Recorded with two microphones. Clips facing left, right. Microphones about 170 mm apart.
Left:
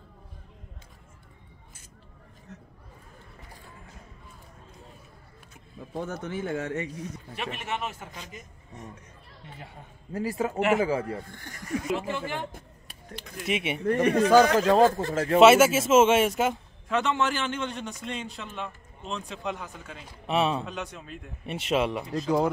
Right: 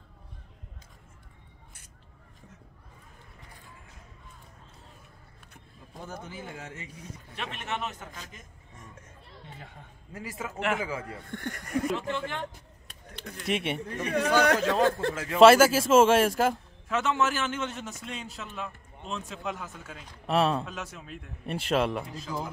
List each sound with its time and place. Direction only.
5.8 s a sound: 65° left (ahead or behind)
6.2 s speech: 75° left (ahead or behind)
7.3 s a man's voice: 5° left (ahead or behind)
10.1 s a man's voice: 35° left (ahead or behind)
11.3 s speech: 60° right (ahead or behind)
11.9 s a man's voice: 5° left (ahead or behind)
13.8 s speech: 65° left (ahead or behind)
14.6 s speech: 45° left (ahead or behind)
14.9 s speech: 65° right (ahead or behind)
15.1 s a man's voice: 40° left (ahead or behind)
15.4 s a man's voice: 5° left (ahead or behind)